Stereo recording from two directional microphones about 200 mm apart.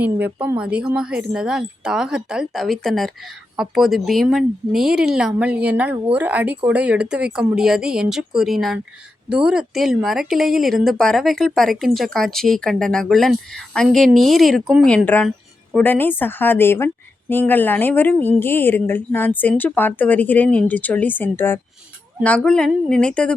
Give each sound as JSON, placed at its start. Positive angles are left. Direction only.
{"t": 0.0, "sound": "a woman's voice", "side_deg": -10}